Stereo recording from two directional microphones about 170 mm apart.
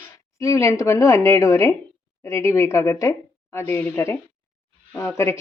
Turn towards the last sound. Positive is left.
turn(degrees=15)  # may be behind; listen again after turning